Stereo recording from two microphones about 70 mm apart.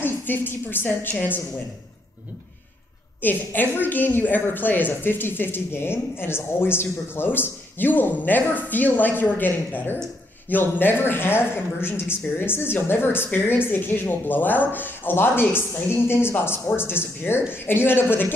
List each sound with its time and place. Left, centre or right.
0.0 s a woman's voice: left
3.2 s a woman's voice: left